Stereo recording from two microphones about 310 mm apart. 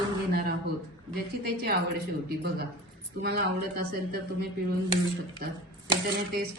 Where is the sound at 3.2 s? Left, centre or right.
Right.